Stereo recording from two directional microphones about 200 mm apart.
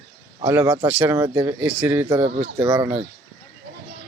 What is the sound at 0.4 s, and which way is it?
Speech, 15° right (ahead or behind).